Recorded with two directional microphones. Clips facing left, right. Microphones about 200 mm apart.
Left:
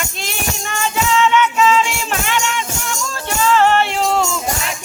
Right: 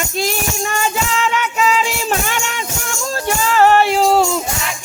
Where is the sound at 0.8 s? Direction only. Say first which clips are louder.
Left 5 dB; 40° right (ahead or behind).